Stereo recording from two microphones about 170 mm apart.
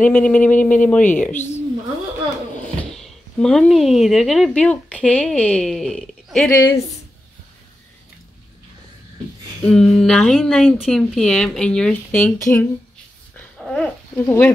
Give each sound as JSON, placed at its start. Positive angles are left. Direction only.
{"t": 0.0, "sound": "speech", "side_deg": 10}
{"t": 2.8, "sound": "speech", "side_deg": 0}
{"t": 6.5, "sound": "speech", "side_deg": 15}
{"t": 9.7, "sound": "a woman's voice", "side_deg": 5}
{"t": 13.4, "sound": "dog", "side_deg": 5}
{"t": 14.2, "sound": "speech", "side_deg": 15}